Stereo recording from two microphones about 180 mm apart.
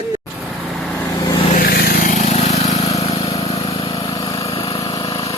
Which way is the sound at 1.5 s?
55° left (ahead or behind).